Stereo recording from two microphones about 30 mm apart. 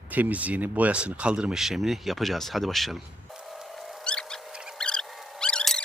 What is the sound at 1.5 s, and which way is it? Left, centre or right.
Speech, centre.